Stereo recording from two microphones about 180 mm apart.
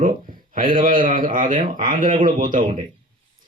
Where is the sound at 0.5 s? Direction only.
50° right (ahead or behind).